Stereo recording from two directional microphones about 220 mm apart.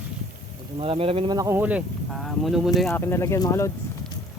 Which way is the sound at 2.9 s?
10° left (ahead or behind).